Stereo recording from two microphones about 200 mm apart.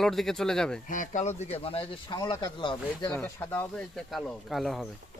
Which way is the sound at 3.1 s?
10° left (ahead or behind).